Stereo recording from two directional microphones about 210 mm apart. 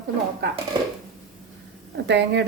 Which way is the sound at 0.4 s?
50° right (ahead or behind).